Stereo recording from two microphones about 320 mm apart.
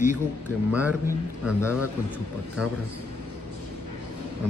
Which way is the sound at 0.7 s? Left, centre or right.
Centre.